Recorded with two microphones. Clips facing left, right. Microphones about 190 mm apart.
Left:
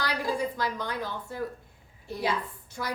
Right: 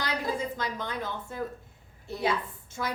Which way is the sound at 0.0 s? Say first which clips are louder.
Left 2 dB; 20° right (ahead or behind).